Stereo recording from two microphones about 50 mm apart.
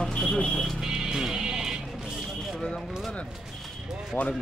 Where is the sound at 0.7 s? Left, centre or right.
Centre.